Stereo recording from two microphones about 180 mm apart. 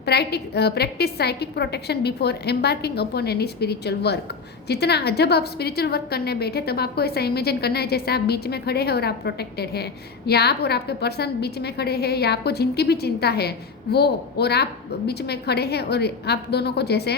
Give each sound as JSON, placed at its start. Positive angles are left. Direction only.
{"t": 0.0, "sound": "a woman's voice", "side_deg": 65}